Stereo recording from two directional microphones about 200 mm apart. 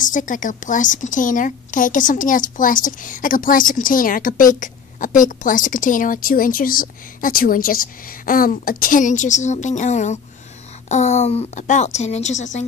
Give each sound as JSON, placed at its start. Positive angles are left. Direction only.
{"t": 0.0, "sound": "a woman's voice", "side_deg": 40}
{"t": 4.6, "sound": "a sound", "side_deg": 40}
{"t": 5.4, "sound": "a woman's voice", "side_deg": 40}